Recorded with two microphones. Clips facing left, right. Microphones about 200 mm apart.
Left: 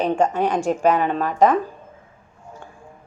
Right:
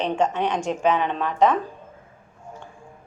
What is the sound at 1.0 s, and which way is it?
Speech, 45° left (ahead or behind).